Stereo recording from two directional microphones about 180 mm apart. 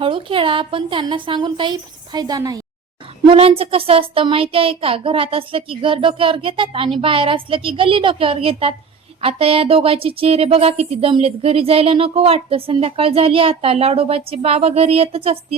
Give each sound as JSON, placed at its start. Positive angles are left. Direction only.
{"t": 0.0, "sound": "a woman's voice", "side_deg": -30}
{"t": 3.2, "sound": "a woman's voice", "side_deg": -30}